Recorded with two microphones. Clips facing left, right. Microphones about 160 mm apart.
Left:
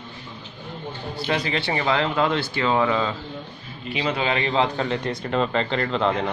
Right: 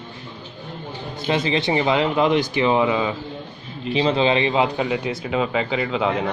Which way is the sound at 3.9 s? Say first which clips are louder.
Right 6 dB; 30° right (ahead or behind).